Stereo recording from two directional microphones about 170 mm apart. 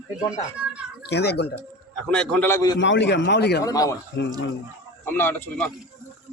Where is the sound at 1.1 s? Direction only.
75° left (ahead or behind).